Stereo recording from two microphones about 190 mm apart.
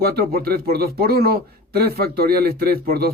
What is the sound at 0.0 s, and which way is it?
A man's voice, 55° right (ahead or behind).